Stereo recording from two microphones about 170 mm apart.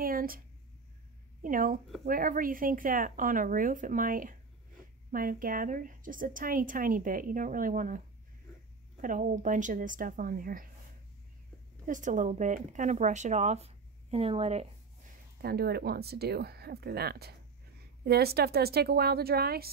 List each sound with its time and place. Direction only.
0.0 s a sound: 60° right (ahead or behind)
1.4 s a woman's voice: 55° right (ahead or behind)
9.0 s a woman's voice: 50° right (ahead or behind)
11.8 s a woman's voice: 50° right (ahead or behind)
15.4 s speech: 65° right (ahead or behind)